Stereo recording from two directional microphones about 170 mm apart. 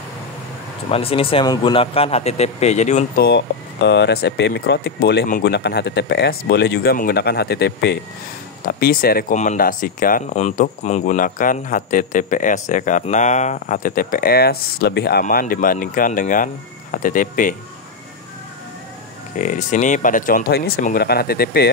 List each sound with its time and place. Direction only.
0.8 s a man's voice: 35° left (ahead or behind)
3.2 s speech: 80° left
8.6 s speech: 60° left (ahead or behind)
15.2 s speech: 55° left (ahead or behind)
19.3 s speech: 50° left (ahead or behind); by 21.6 s 65° left (ahead or behind)